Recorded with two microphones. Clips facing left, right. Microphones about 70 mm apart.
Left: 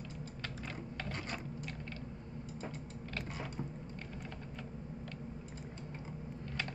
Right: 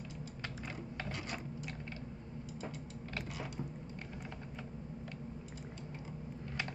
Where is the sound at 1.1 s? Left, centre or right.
Left.